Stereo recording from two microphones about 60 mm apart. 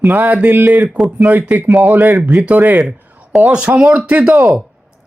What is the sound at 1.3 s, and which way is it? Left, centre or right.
Speech, right.